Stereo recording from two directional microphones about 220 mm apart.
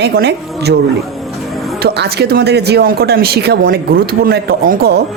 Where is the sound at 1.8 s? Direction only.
45° right (ahead or behind).